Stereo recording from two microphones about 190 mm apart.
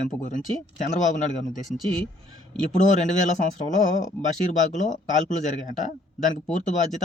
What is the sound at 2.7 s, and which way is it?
Speech, 40° left (ahead or behind).